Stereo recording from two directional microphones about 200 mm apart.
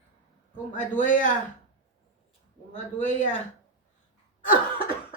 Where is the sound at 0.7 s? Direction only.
40° left (ahead or behind).